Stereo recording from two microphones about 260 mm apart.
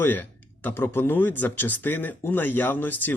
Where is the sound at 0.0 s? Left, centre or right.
Centre.